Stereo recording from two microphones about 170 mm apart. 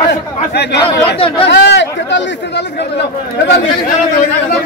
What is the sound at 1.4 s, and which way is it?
Speech, 90° left.